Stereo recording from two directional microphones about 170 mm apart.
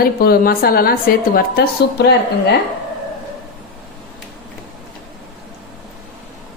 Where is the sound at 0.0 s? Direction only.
60° left (ahead or behind).